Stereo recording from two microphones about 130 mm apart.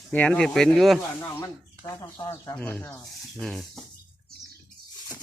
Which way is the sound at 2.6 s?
15° left (ahead or behind).